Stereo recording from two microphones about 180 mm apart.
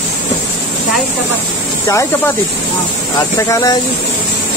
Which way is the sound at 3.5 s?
20° left (ahead or behind).